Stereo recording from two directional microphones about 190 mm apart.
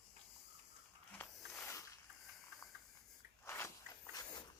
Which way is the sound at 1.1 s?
10° left (ahead or behind).